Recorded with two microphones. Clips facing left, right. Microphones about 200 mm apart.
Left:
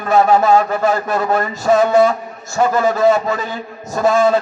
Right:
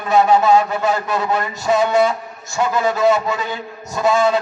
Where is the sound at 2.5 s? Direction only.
40° left (ahead or behind).